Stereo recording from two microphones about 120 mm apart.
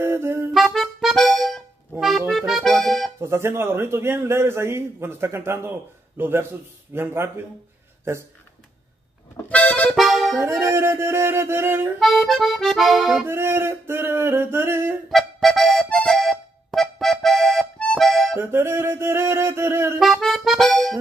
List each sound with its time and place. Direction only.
0.0 s music: 20° right (ahead or behind)
0.5 s accordion: centre (ahead or behind)
3.2 s a man's voice: 20° right (ahead or behind)
9.5 s accordion: 10° left (ahead or behind)
10.4 s a man's voice: 25° right (ahead or behind)
12.0 s accordion: centre (ahead or behind)
13.2 s a man's voice: 20° right (ahead or behind)
15.0 s music: centre (ahead or behind)
18.3 s a man's voice: 20° right (ahead or behind)
20.0 s accordion: centre (ahead or behind)